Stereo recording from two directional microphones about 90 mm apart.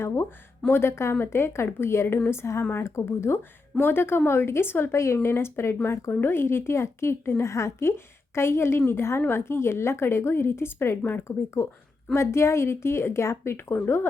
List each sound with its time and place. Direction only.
0.7 s speech: 30° left (ahead or behind)